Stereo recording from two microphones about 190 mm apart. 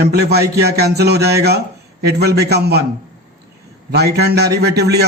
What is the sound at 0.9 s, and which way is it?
A man's voice, 60° right (ahead or behind).